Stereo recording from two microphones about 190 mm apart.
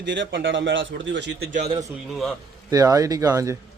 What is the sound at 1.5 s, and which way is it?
Speech, 40° right (ahead or behind).